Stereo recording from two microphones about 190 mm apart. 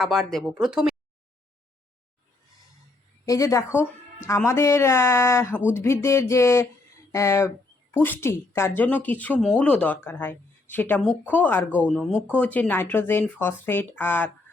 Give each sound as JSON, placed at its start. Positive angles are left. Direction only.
{"t": 0.0, "sound": "speech", "side_deg": 0}
{"t": 3.2, "sound": "speech", "side_deg": 15}